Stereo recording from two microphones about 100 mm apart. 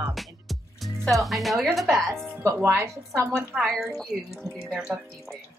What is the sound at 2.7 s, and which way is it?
Speech, 30° right (ahead or behind).